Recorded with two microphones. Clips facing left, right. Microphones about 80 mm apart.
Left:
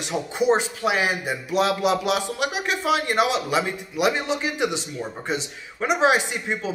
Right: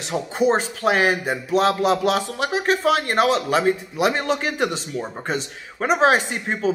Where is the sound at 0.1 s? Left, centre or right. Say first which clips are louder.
Right 1 dB; right.